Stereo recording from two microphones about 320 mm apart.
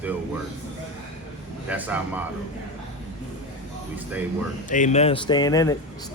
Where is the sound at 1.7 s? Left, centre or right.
Centre.